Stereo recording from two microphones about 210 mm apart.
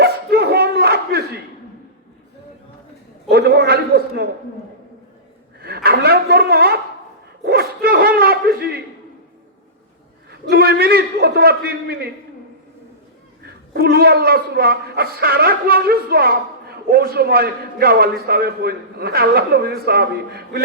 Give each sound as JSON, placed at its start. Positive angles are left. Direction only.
{"t": 0.0, "sound": "a sound", "side_deg": -50}
{"t": 3.2, "sound": "a man's voice", "side_deg": -50}
{"t": 5.5, "sound": "speech", "side_deg": -50}
{"t": 7.4, "sound": "dog", "side_deg": -50}
{"t": 10.5, "sound": "a man's voice", "side_deg": -50}
{"t": 13.4, "sound": "a man's voice", "side_deg": -50}